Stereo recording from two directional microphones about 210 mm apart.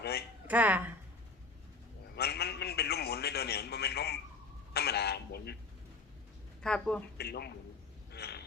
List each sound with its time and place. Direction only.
0.4 s a woman's voice: 5° right (ahead or behind)
2.1 s a sound: 50° left (ahead or behind)
4.7 s speech: 50° left (ahead or behind)
6.6 s speech: 5° left (ahead or behind)
7.2 s a man's voice: 50° left (ahead or behind)
8.1 s a sound: 50° left (ahead or behind)